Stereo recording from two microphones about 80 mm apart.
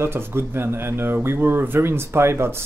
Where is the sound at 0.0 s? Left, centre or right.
Right.